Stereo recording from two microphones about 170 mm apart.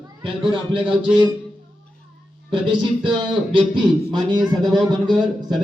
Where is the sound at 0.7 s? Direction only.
30° right (ahead or behind).